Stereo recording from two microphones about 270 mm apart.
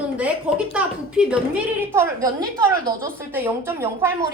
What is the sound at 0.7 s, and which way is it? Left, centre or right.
A woman's voice, centre.